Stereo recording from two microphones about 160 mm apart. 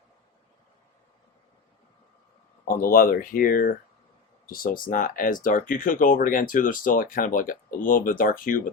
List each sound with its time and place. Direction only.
2.6 s speech: 65° left (ahead or behind)